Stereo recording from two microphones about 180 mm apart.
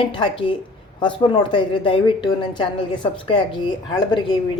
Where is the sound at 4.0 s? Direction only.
25° left (ahead or behind).